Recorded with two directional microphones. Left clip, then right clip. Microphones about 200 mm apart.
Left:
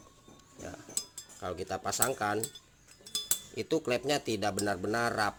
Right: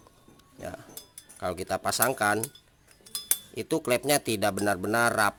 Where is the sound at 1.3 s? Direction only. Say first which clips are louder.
Right 6 dB; 30° right (ahead or behind).